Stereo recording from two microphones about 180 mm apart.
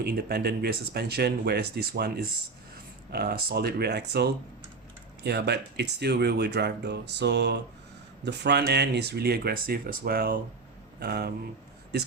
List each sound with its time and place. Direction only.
0.0 s speech: 60° right (ahead or behind)